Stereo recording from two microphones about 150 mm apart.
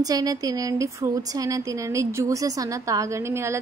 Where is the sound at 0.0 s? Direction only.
25° right (ahead or behind).